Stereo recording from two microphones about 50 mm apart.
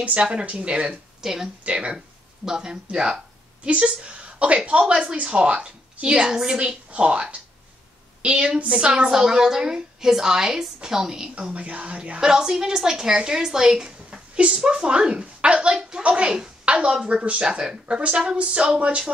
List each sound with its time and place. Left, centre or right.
0.2 s a woman's voice: centre
1.2 s speech: centre
1.6 s a woman's voice: right
2.4 s a woman's voice: centre
11.3 s a woman's voice: right